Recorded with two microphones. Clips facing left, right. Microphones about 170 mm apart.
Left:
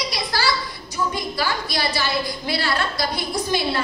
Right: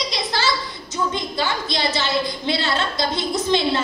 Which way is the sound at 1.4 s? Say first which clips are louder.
Right 1 dB; 20° right (ahead or behind).